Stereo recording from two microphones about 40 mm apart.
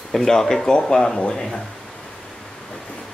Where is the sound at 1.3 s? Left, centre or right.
Centre.